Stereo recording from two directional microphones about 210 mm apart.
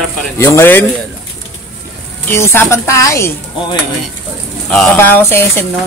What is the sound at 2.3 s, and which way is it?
Speech, 10° left (ahead or behind).